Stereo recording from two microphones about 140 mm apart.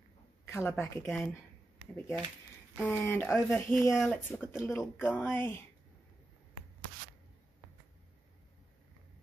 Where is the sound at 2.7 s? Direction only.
5° right (ahead or behind).